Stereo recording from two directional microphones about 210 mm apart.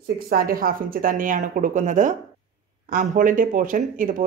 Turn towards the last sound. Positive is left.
turn(degrees=-40)  # may be behind; listen again after turning